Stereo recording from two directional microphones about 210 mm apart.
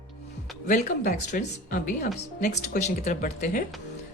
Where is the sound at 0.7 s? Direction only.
35° left (ahead or behind).